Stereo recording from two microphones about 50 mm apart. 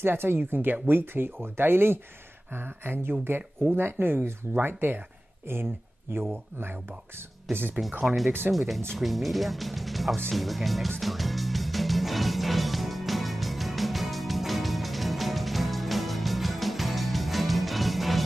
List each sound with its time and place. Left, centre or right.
0.0 s speech: right
6.1 s speech: right
7.8 s speech: centre
11.0 s music: centre